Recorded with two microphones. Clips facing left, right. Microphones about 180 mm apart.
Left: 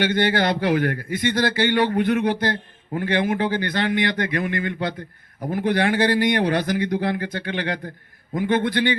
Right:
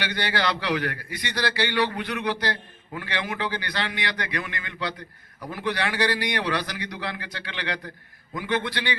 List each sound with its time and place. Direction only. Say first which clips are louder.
0.0 s a man's voice: left 7 dB; 50° left (ahead or behind)